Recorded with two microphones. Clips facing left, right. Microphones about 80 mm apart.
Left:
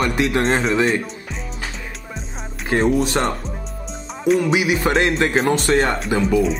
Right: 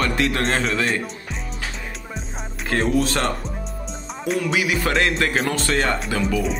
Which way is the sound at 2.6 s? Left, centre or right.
Left.